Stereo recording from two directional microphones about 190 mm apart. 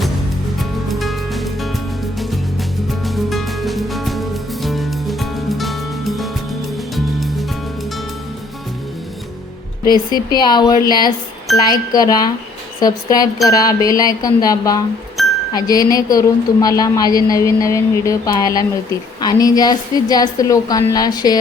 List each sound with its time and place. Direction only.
0.6 s music: centre (ahead or behind)
3.0 s music: centre (ahead or behind)
9.8 s a woman's voice: 20° left (ahead or behind)
15.2 s music: centre (ahead or behind)
15.5 s a woman's voice: 20° left (ahead or behind)